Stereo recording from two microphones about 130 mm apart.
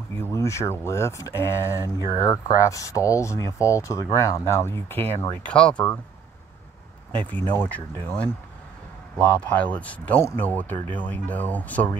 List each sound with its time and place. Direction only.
0.2 s speech: 20° left (ahead or behind)
7.2 s speech: 15° left (ahead or behind)
9.6 s speech: 10° left (ahead or behind)